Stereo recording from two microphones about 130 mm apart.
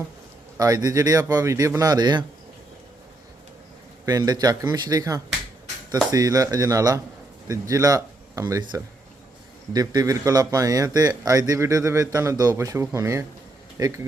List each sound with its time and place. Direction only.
0.5 s a man's voice: 25° right (ahead or behind)
4.0 s a man's voice: 30° right (ahead or behind)
9.7 s a man's voice: 30° right (ahead or behind)